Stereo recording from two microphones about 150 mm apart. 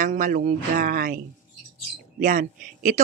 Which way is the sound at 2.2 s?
60° right (ahead or behind).